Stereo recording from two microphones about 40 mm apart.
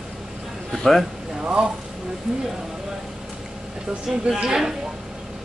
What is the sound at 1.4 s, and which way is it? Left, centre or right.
Speech, right.